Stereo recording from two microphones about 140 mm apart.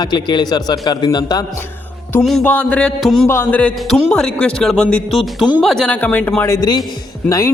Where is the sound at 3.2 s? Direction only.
15° left (ahead or behind).